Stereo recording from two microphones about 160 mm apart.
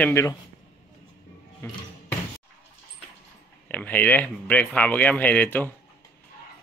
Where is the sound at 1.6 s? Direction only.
15° left (ahead or behind).